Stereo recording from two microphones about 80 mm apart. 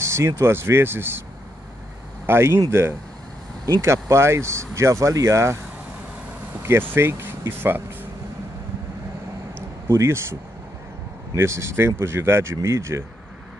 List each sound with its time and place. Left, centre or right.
0.0 s a sound: right
0.4 s speech: right
2.2 s speech: right
3.8 s speech: right
6.9 s speech: right
9.8 s speech: right
11.3 s speech: right